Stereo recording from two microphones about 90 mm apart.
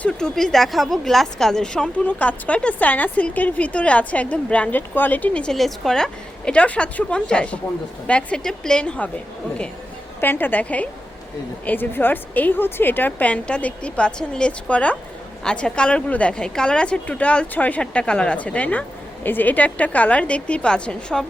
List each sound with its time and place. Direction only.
0.0 s a woman's voice: 5° left (ahead or behind)
10.2 s a woman's voice: 20° left (ahead or behind)